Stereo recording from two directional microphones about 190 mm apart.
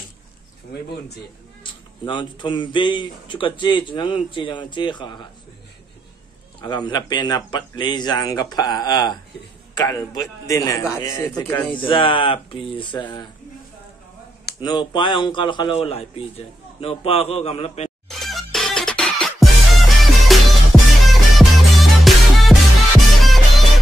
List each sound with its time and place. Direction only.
1.6 s speech: 25° left (ahead or behind)
6.6 s speech: 20° left (ahead or behind)
14.6 s speech: 20° left (ahead or behind)
18.0 s music: centre (ahead or behind)